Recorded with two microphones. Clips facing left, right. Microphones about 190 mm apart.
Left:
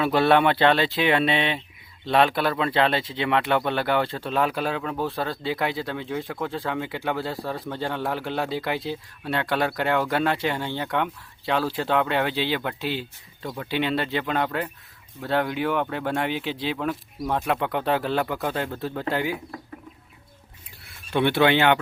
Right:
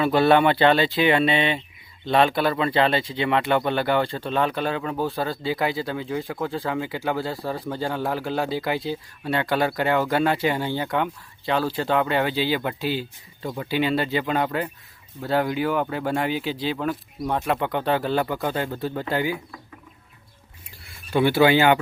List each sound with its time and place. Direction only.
0.0 s speech: centre (ahead or behind)
20.8 s speech: 5° right (ahead or behind)